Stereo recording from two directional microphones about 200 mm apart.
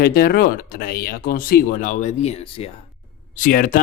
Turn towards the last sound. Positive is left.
turn(degrees=45)  # may be behind; listen again after turning